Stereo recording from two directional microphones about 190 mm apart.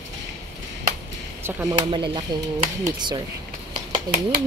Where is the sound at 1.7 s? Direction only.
25° right (ahead or behind).